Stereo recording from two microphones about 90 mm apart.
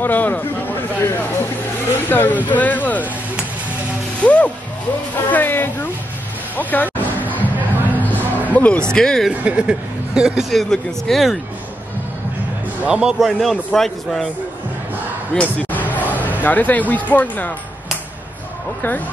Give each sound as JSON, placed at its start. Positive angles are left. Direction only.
{"t": 0.0, "sound": "speech", "side_deg": 20}
{"t": 4.2, "sound": "speech", "side_deg": 15}
{"t": 7.2, "sound": "music", "side_deg": -20}
{"t": 7.9, "sound": "music", "side_deg": 20}
{"t": 8.5, "sound": "speech", "side_deg": 15}
{"t": 9.4, "sound": "speech", "side_deg": -10}
{"t": 12.8, "sound": "speech", "side_deg": -10}
{"t": 15.3, "sound": "basketball bounce", "side_deg": 15}
{"t": 16.0, "sound": "a sound", "side_deg": -20}
{"t": 16.3, "sound": "speech", "side_deg": 20}